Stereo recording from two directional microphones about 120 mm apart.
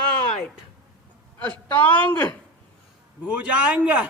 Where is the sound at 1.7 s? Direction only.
15° left (ahead or behind).